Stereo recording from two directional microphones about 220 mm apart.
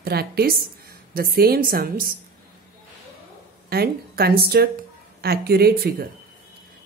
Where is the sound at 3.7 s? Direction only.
45° right (ahead or behind).